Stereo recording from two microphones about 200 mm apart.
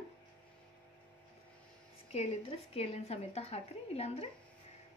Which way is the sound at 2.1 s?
30° left (ahead or behind).